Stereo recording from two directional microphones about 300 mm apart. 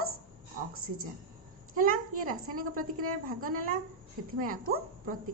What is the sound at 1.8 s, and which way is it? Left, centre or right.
A woman's voice, right.